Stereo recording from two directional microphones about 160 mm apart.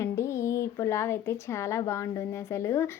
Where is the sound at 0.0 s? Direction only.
15° left (ahead or behind).